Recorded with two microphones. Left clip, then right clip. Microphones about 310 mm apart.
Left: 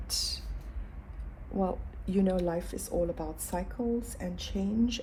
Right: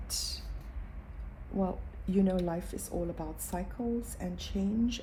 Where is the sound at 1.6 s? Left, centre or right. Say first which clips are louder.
Left 3 dB; left.